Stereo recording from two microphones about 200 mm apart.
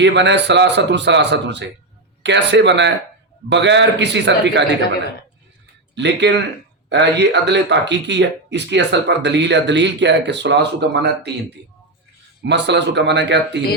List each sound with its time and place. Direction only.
0.0 s speech: 60° right (ahead or behind)
5.9 s speech: 60° right (ahead or behind)
12.5 s speech: 60° right (ahead or behind)